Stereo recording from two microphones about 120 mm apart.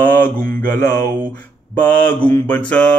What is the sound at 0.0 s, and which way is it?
Mantra, 15° left (ahead or behind).